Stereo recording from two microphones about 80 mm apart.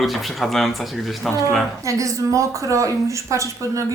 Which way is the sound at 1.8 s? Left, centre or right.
Right.